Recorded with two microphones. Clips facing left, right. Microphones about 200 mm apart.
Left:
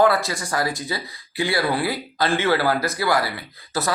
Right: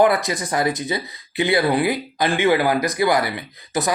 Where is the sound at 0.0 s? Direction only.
20° right (ahead or behind).